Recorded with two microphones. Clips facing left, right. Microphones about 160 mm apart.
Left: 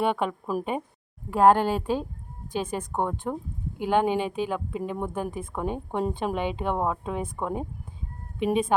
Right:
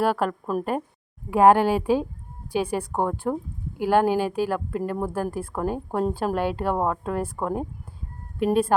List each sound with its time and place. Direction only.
0.0 s speech: centre (ahead or behind)
1.3 s a woman's voice: 10° right (ahead or behind)